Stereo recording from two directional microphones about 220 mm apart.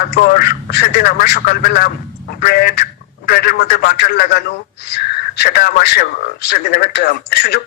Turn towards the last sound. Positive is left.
turn(degrees=45)  # may be behind; listen again after turning